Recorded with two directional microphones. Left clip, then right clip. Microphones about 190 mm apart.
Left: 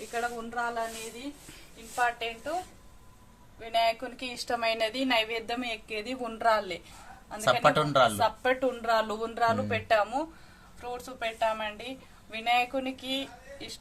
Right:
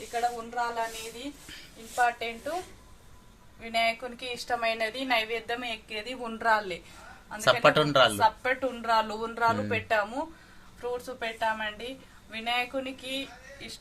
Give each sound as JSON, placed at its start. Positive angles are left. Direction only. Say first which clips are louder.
{"t": 0.1, "sound": "speech", "louder": "right 3 dB", "side_deg": 10}
{"t": 2.0, "sound": "a woman's voice", "louder": "right 2 dB", "side_deg": 40}
{"t": 3.6, "sound": "a woman's voice", "louder": "left 1 dB", "side_deg": 45}
{"t": 7.3, "sound": "speech", "louder": "right 2 dB", "side_deg": -5}
{"t": 8.2, "sound": "a woman's voice", "louder": "right 1 dB", "side_deg": 45}